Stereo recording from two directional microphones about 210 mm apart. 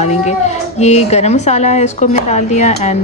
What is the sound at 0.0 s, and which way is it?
A woman's voice, 35° left (ahead or behind).